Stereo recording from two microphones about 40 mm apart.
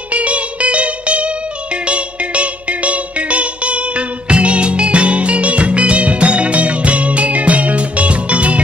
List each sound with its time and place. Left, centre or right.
0.1 s music: right